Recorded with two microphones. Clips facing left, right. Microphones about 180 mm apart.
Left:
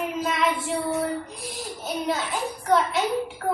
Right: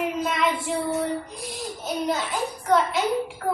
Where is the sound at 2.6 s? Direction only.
Centre (ahead or behind).